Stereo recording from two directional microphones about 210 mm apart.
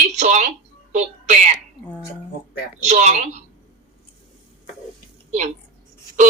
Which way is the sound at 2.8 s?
35° right (ahead or behind).